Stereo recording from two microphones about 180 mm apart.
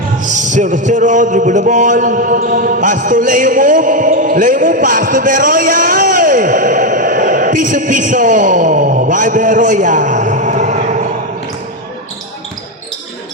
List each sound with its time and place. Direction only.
0.2 s a man's voice: 45° right (ahead or behind)